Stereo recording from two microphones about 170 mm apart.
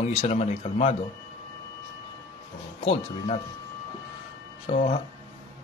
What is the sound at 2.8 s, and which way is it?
Speech, 35° left (ahead or behind).